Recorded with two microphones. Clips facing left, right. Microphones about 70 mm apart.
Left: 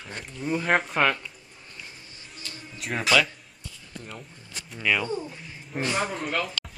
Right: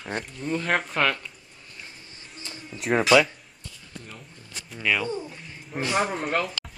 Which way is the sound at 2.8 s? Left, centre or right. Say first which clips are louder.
Right 8 dB; centre.